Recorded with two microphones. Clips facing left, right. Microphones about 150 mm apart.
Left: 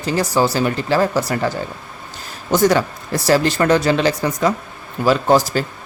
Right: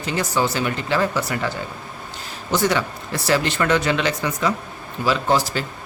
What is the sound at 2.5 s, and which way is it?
Speech, 45° left (ahead or behind).